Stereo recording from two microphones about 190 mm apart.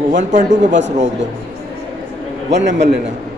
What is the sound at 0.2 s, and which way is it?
Speech, 40° right (ahead or behind).